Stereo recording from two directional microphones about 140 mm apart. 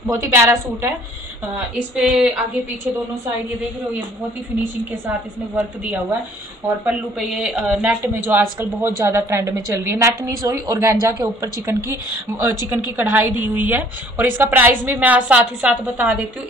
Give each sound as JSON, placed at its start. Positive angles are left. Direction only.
{"t": 0.0, "sound": "speech", "side_deg": -20}
{"t": 1.5, "sound": "speech", "side_deg": -5}
{"t": 6.8, "sound": "a woman's voice", "side_deg": -5}